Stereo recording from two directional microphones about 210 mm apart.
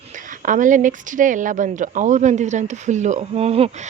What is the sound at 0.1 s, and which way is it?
A woman's voice, 40° right (ahead or behind).